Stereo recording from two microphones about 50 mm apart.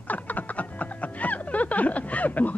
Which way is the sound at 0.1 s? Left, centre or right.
Left.